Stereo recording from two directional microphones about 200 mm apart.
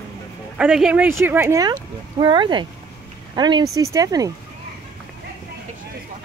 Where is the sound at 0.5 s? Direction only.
5° right (ahead or behind).